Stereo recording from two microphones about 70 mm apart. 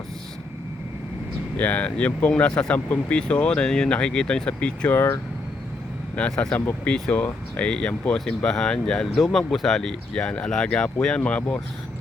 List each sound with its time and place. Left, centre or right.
1.5 s speech: left
4.9 s speech: left
6.1 s speech: centre